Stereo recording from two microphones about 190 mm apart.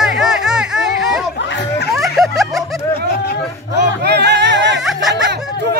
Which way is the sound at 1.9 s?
Centre (ahead or behind).